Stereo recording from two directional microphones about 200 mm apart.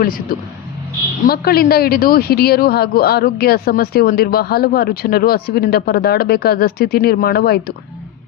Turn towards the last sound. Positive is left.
turn(degrees=50)  # may be behind; listen again after turning